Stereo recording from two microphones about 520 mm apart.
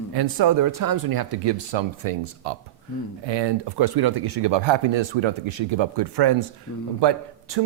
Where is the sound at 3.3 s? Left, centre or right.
Right.